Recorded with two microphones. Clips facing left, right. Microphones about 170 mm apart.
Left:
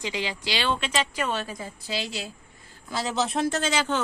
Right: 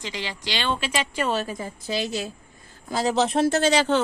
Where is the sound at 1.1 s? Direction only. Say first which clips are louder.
Right 4 dB; 35° right (ahead or behind).